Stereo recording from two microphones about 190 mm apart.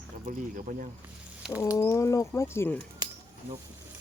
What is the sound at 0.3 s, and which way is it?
Speech, 45° right (ahead or behind).